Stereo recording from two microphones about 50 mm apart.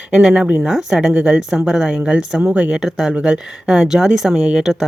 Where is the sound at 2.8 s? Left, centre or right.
Centre.